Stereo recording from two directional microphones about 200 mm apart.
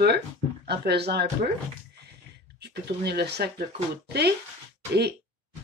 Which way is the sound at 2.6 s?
55° right (ahead or behind).